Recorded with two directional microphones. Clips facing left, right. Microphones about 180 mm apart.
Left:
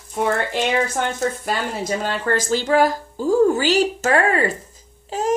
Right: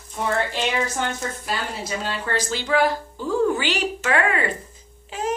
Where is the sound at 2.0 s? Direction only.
50° left (ahead or behind).